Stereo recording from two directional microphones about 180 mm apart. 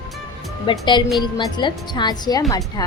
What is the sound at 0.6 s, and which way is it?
Speech, 25° left (ahead or behind).